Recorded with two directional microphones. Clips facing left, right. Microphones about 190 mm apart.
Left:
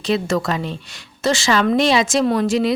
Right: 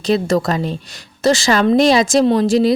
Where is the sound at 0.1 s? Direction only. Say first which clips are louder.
Right 4 dB; 40° right (ahead or behind).